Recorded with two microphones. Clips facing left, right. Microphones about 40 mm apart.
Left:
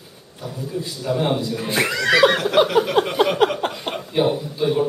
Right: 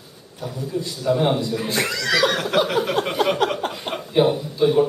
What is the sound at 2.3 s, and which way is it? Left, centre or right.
Speech, centre.